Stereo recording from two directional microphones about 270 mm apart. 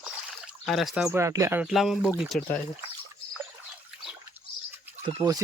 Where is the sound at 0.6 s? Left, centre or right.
Centre.